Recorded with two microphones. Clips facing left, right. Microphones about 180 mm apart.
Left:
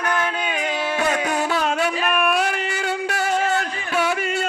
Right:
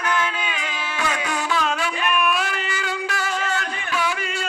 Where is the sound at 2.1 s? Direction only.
55° left (ahead or behind).